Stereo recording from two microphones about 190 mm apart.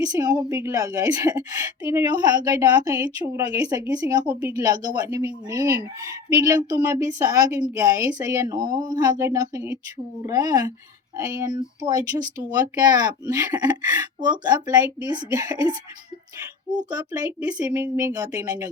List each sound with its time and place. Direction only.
0.0 s speech: 20° right (ahead or behind)
1.3 s speech: 10° right (ahead or behind)
17.2 s speech: 5° right (ahead or behind)